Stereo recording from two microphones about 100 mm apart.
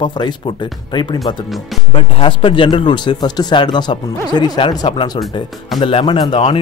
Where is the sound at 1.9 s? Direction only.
60° left (ahead or behind); by 4.6 s 45° left (ahead or behind).